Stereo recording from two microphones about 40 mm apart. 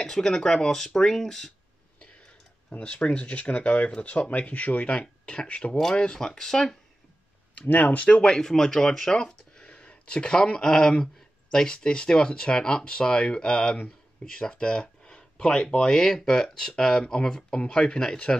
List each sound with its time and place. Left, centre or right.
0.0 s speech: centre
2.8 s speech: left
4.9 s speech: left
6.1 s speech: centre
7.6 s speech: left
8.2 s speech: centre